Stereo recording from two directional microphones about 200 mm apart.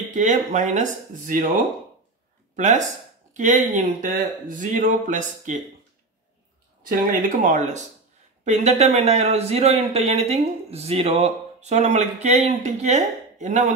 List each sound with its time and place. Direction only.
0.1 s speech: 35° right (ahead or behind)
6.9 s speech: 45° right (ahead or behind)